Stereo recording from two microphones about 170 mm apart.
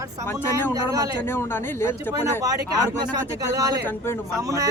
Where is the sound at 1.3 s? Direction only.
15° left (ahead or behind).